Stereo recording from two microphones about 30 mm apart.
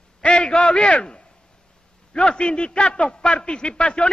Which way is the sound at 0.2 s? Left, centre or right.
Left.